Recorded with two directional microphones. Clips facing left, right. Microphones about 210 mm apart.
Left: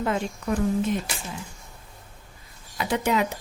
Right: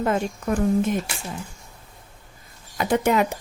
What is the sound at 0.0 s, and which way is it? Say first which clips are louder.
Speech: right 3 dB; 50° right (ahead or behind).